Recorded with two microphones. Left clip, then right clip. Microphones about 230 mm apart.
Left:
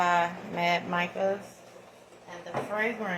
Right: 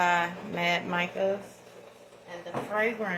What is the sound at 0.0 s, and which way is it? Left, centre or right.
Speech, centre.